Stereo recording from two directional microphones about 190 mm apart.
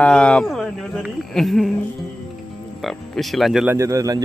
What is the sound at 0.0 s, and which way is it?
Speech, 5° left (ahead or behind).